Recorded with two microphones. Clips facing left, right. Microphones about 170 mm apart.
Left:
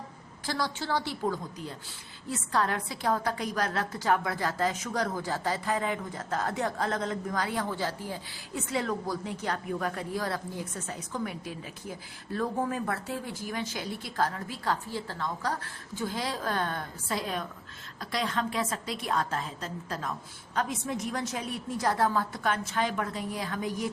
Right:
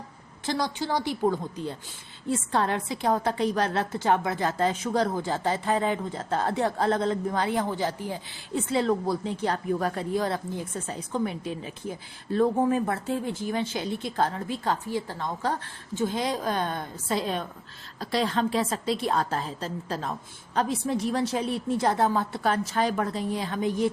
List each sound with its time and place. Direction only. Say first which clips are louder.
0.4 s a woman's voice: right 4 dB; 20° right (ahead or behind)